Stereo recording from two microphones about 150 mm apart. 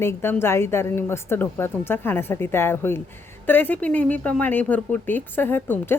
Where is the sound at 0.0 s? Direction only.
15° left (ahead or behind).